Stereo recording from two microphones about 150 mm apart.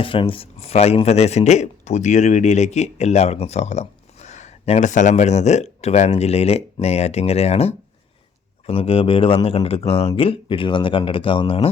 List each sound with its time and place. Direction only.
0.0 s speech: 35° left (ahead or behind)